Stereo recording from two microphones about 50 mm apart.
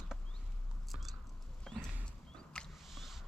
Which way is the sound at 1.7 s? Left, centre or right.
Centre.